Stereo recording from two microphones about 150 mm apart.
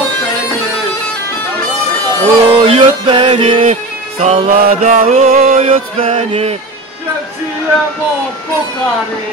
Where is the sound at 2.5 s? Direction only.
35° right (ahead or behind).